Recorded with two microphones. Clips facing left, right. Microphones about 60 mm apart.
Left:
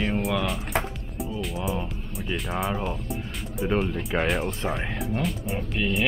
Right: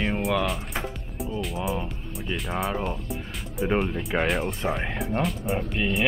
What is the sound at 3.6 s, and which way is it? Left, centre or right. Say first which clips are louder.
Speech: right 1 dB; centre.